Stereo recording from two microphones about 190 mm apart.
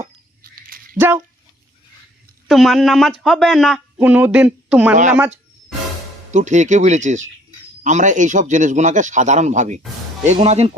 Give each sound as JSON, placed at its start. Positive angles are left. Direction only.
{"t": 0.0, "sound": "dog", "side_deg": -50}
{"t": 0.9, "sound": "dog", "side_deg": -10}
{"t": 2.5, "sound": "speech", "side_deg": 0}
{"t": 6.3, "sound": "a man's voice", "side_deg": -40}